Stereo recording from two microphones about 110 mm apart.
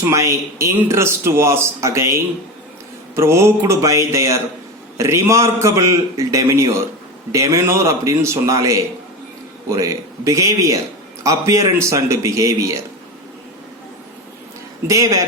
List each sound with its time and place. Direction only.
0.1 s a man's voice: 25° right (ahead or behind)
14.8 s speech: 30° right (ahead or behind)